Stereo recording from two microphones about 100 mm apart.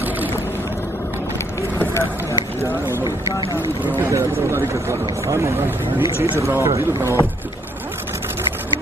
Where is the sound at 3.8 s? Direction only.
25° right (ahead or behind).